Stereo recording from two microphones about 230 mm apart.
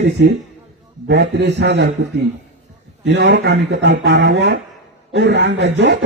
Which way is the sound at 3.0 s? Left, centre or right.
Right.